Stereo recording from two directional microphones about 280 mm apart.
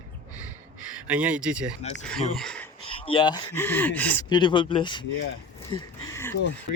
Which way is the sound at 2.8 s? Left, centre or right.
Centre.